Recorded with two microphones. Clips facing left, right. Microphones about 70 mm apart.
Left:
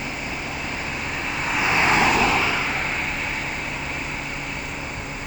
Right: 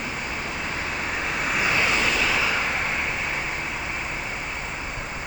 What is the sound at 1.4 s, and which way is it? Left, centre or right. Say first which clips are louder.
Vehicle: left 2 dB; centre.